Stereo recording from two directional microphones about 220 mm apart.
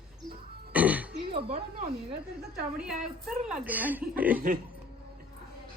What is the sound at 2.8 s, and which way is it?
A woman's voice, centre (ahead or behind).